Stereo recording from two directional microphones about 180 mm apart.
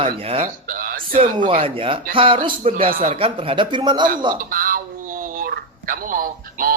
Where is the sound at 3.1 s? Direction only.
30° right (ahead or behind).